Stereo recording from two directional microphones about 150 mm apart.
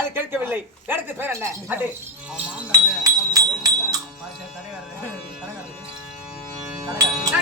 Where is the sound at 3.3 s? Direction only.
25° right (ahead or behind).